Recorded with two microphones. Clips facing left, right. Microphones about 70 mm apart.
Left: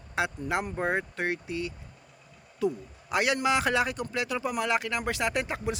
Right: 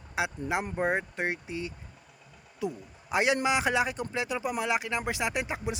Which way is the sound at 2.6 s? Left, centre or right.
Centre.